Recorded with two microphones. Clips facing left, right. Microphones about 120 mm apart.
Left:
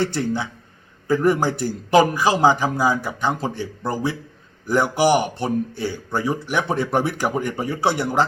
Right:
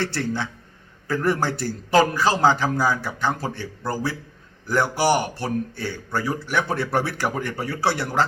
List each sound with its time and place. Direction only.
0.0 s speech: 15° left (ahead or behind)